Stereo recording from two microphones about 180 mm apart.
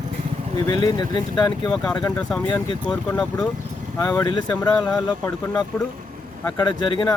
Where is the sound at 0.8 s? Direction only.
20° left (ahead or behind).